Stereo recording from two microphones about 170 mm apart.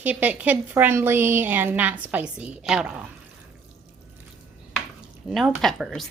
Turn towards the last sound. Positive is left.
turn(degrees=0)  # may be behind; listen again after turning